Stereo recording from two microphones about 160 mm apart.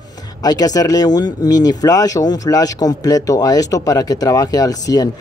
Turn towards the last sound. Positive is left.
turn(degrees=25)  # may be behind; listen again after turning